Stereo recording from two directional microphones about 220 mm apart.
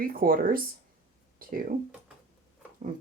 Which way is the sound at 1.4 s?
40° right (ahead or behind).